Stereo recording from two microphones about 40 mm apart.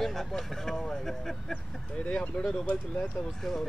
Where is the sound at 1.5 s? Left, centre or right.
Left.